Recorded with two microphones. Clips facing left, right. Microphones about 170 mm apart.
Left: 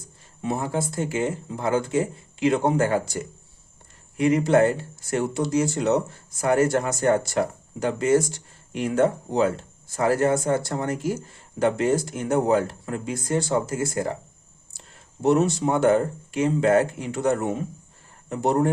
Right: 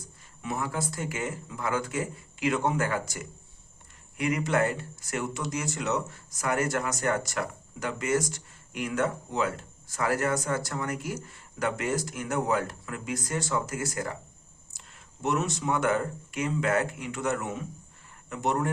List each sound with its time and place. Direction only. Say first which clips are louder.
0.4 s speech: left 6 dB; 30° left (ahead or behind)